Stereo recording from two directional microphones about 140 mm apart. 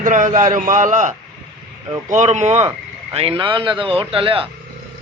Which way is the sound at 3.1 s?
40° right (ahead or behind).